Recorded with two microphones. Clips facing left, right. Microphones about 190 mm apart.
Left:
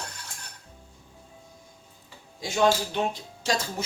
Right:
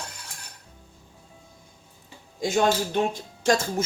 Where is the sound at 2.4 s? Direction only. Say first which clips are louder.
Right 1 dB; 50° right (ahead or behind).